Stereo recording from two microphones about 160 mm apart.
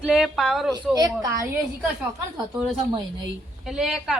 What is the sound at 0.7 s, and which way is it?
Speech, 25° right (ahead or behind).